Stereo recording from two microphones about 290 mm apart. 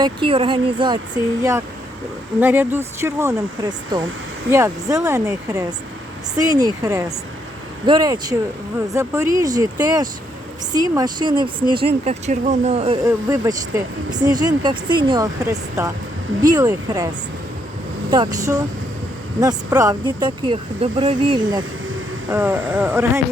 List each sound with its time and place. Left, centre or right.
0.0 s speech: centre
18.1 s speech: centre